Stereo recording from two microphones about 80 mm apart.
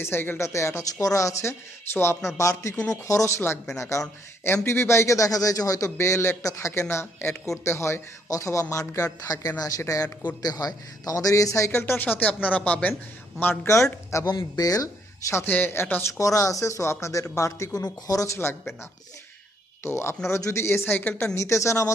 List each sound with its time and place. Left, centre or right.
0.0 s a man's voice: left
11.8 s speech: left
13.7 s a man's voice: left
14.3 s speech: left
15.4 s speech: left
16.1 s a man's voice: left
18.3 s a man's voice: left
19.8 s a man's voice: left
21.3 s a man's voice: left